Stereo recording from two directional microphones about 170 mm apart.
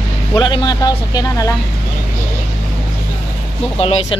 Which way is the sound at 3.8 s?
35° left (ahead or behind).